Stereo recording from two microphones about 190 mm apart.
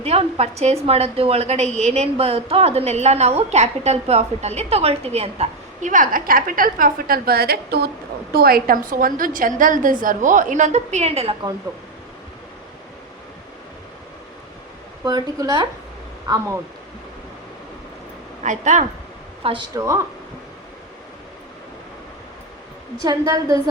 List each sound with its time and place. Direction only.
0.0 s a woman's voice: 35° right (ahead or behind)
15.0 s a woman's voice: 20° right (ahead or behind)
18.4 s a woman's voice: 40° right (ahead or behind)
19.4 s a woman's voice: 30° right (ahead or behind)
19.7 s speech: 20° right (ahead or behind)
23.0 s a woman's voice: 20° right (ahead or behind)